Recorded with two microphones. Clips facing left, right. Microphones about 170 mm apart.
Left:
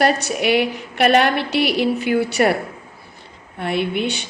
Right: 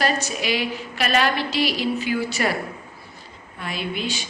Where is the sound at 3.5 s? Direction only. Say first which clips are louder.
Left 8 dB; 65° left (ahead or behind).